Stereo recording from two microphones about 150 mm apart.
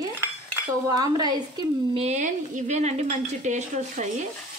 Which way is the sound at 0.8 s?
25° right (ahead or behind).